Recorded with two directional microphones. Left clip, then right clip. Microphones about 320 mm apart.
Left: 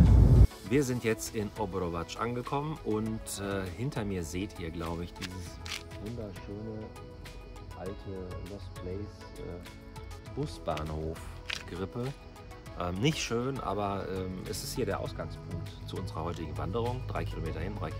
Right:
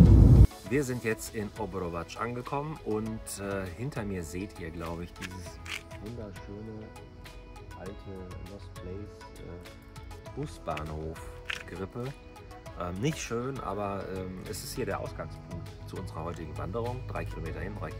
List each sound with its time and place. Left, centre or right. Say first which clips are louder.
0.7 s speech: left 4 dB; centre
10.4 s speech: left 1 dB; centre
13.0 s speech: left 3 dB; centre
13.4 s speech: left 1 dB; centre